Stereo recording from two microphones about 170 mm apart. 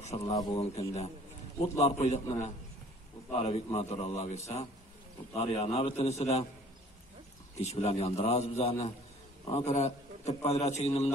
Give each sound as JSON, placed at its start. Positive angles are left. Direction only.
{"t": 0.2, "sound": "speech", "side_deg": 20}
{"t": 0.6, "sound": "a man's voice", "side_deg": 35}
{"t": 7.6, "sound": "a man's voice", "side_deg": 40}